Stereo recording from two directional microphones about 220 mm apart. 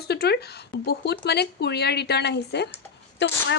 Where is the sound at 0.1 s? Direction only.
45° left (ahead or behind).